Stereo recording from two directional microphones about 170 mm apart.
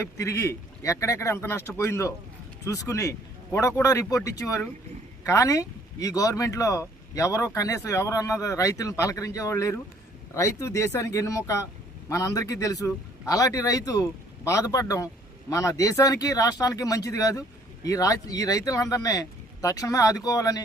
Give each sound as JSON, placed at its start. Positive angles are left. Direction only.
{"t": 0.0, "sound": "a man's voice", "side_deg": 20}